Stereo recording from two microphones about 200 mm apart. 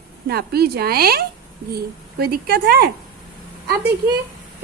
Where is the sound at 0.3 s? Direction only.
50° right (ahead or behind).